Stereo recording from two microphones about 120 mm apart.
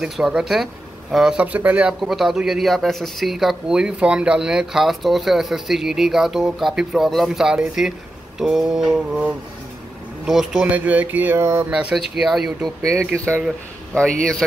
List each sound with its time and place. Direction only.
0.0 s speech: 5° right (ahead or behind); by 11.6 s 20° right (ahead or behind)
11.7 s speech: 5° right (ahead or behind)
12.8 s speech: 20° right (ahead or behind)